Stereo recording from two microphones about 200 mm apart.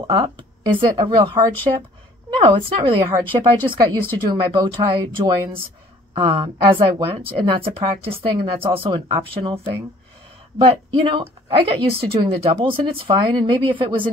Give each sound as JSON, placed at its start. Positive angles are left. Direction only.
{"t": 0.0, "sound": "speech", "side_deg": -20}
{"t": 11.1, "sound": "speech", "side_deg": -25}